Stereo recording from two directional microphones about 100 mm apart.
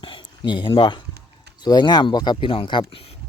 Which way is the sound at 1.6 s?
45° left (ahead or behind).